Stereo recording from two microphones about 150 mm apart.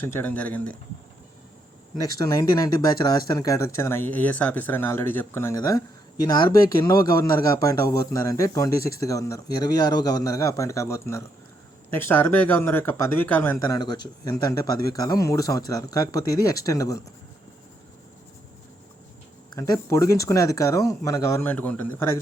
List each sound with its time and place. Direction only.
0.0 s speech: 15° left (ahead or behind)
2.0 s speech: 25° left (ahead or behind)
19.5 s speech: 20° left (ahead or behind)